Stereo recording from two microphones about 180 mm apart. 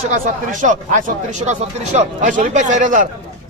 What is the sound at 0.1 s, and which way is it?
Speech, 45° right (ahead or behind).